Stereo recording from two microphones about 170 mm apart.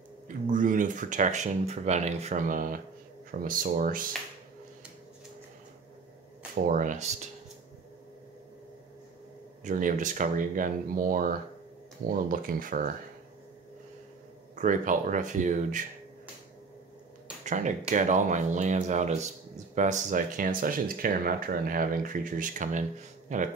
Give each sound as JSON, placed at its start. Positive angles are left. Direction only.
{"t": 0.3, "sound": "speech", "side_deg": -50}
{"t": 6.5, "sound": "speech", "side_deg": -50}
{"t": 9.7, "sound": "speech", "side_deg": -50}
{"t": 14.5, "sound": "speech", "side_deg": -50}
{"t": 17.5, "sound": "speech", "side_deg": -45}